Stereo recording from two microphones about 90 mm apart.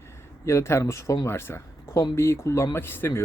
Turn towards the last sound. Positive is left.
turn(degrees=25)  # may be behind; listen again after turning